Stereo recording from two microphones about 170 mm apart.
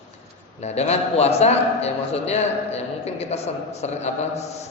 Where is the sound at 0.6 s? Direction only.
40° left (ahead or behind).